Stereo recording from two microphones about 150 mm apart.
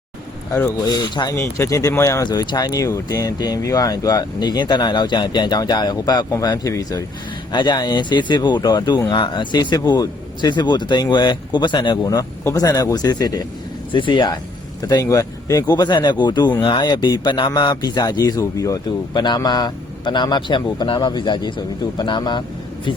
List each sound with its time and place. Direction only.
0.9 s speech: 30° left (ahead or behind)